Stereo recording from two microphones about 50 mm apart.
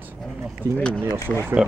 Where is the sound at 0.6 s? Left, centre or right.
Right.